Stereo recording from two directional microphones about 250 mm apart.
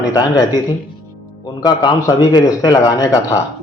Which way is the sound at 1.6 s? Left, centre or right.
Centre.